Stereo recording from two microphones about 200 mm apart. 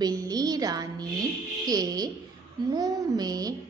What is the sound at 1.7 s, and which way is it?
A woman's voice, 20° right (ahead or behind).